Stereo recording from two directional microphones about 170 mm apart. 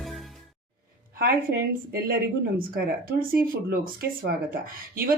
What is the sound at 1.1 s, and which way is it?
Speech, 60° right (ahead or behind).